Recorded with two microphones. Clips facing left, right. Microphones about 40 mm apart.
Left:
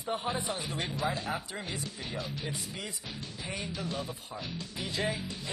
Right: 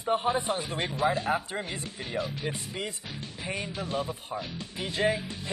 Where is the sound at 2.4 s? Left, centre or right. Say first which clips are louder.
Right 5 dB; right.